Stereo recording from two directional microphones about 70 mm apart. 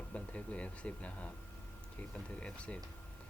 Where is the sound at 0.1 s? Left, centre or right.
Centre.